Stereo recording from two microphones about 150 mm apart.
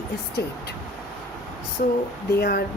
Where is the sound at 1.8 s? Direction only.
75° left (ahead or behind).